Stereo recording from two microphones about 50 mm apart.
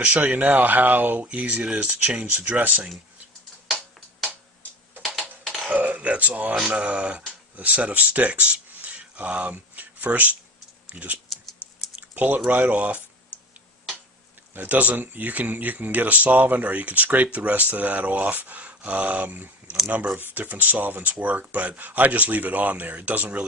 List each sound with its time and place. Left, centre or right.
0.0 s speech: right
5.6 s a sound: right
6.7 s speech: right
11.9 s typing: right
12.4 s speech: right
14.5 s speech: right